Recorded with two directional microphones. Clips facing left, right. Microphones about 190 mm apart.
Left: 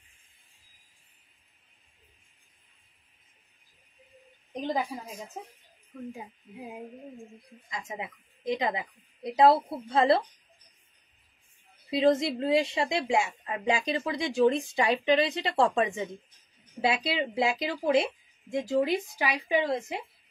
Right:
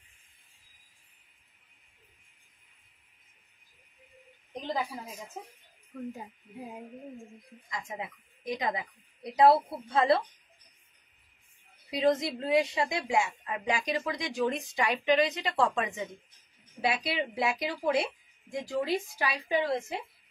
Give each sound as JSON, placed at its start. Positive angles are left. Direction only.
{"t": 4.6, "sound": "a woman's voice", "side_deg": 15}
{"t": 7.7, "sound": "a woman's voice", "side_deg": 25}
{"t": 11.9, "sound": "a woman's voice", "side_deg": 25}